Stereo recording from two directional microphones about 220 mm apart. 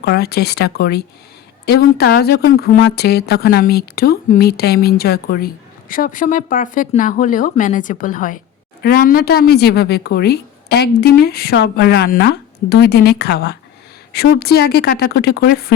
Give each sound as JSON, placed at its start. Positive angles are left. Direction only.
{"t": 0.0, "sound": "speech", "side_deg": 45}